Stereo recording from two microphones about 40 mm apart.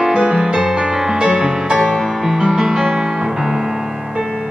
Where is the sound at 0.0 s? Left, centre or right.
Centre.